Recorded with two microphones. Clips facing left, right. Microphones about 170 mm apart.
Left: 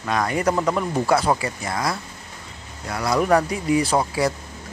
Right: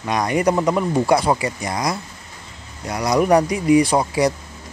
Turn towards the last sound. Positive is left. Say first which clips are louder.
# right 3 dB
turn(degrees=-15)  # may be behind; listen again after turning